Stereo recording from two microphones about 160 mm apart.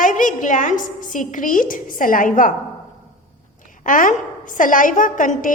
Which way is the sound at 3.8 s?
55° left (ahead or behind).